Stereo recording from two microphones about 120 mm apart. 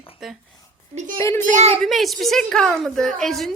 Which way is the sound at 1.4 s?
90° right.